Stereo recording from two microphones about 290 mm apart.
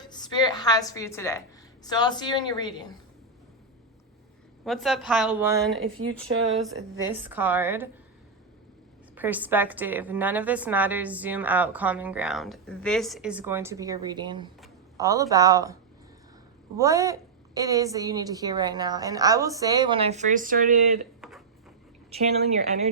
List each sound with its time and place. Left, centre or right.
0.0 s a woman's voice: centre
4.6 s a woman's voice: centre
5.8 s speech: right
7.1 s a woman's voice: centre
9.1 s a woman's voice: centre; by 20.6 s right
21.2 s a sound: centre
22.1 s a woman's voice: right